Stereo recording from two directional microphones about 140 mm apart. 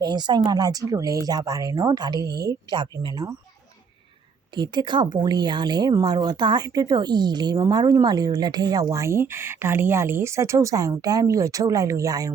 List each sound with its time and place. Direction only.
0.0 s speech: 30° right (ahead or behind)
4.5 s speech: 30° right (ahead or behind)